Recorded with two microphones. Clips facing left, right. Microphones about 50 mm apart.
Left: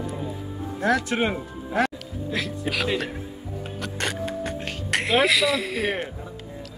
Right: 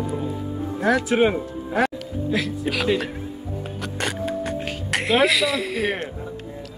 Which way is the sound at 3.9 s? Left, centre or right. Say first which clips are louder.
Right 3 dB; centre.